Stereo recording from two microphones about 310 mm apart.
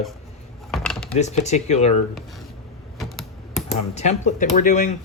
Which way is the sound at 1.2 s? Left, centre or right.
Left.